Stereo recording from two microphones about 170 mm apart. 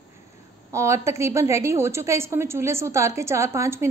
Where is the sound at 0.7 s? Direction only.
15° right (ahead or behind).